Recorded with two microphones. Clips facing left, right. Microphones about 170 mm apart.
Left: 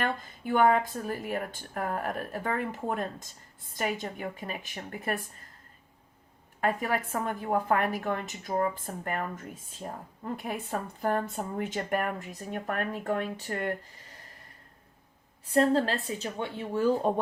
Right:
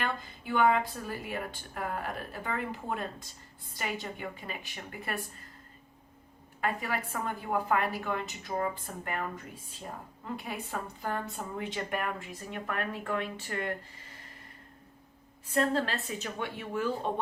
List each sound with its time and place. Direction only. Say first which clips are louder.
0.0 s a woman's voice: left 4 dB; 45° left (ahead or behind)
6.6 s a woman's voice: left 4 dB; 45° left (ahead or behind)
15.5 s speech: left 5 dB; 35° left (ahead or behind)